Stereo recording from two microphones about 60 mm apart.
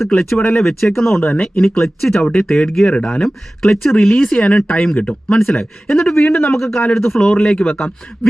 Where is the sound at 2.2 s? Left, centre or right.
Centre.